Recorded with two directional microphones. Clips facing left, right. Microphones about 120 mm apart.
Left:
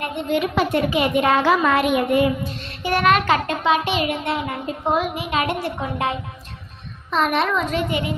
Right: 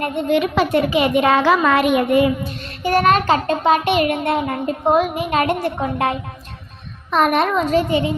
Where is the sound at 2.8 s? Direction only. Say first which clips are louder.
Right 3 dB; 40° right (ahead or behind).